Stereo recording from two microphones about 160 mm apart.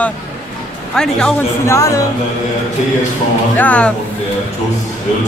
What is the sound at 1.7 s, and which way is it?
Speech, 20° left (ahead or behind).